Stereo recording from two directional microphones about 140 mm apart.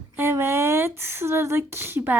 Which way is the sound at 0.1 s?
15° right (ahead or behind).